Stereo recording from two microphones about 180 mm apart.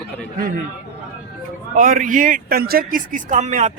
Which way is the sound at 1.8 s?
50° right (ahead or behind).